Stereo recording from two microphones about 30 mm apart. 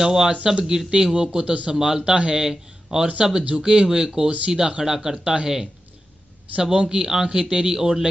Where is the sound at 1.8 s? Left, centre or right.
Right.